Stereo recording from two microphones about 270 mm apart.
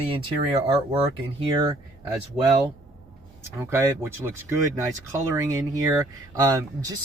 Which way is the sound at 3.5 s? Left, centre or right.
Centre.